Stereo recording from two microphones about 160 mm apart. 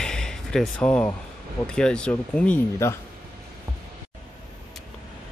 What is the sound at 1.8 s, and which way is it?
Speech, 5° left (ahead or behind).